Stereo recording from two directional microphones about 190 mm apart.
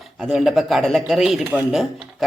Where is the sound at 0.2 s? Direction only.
Centre (ahead or behind).